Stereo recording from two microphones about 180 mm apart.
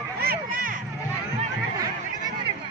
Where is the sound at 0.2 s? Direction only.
55° right (ahead or behind).